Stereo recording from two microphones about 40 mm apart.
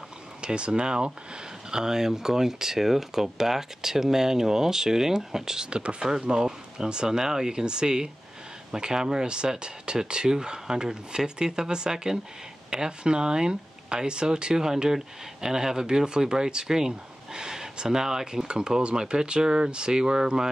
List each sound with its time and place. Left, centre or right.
0.4 s speech: right